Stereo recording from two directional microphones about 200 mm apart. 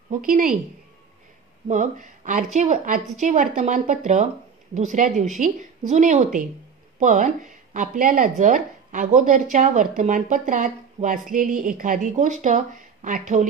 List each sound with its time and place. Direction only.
0.1 s a woman's voice: 40° right (ahead or behind)
1.7 s speech: 40° right (ahead or behind)